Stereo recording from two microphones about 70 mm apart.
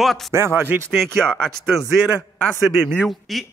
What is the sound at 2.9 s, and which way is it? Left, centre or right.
Speech, centre.